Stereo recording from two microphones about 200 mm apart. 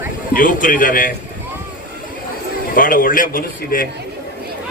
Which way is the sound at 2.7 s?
45° left (ahead or behind).